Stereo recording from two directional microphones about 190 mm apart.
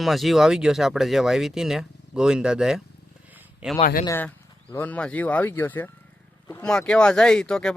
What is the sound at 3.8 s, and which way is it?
Speech, 45° left (ahead or behind).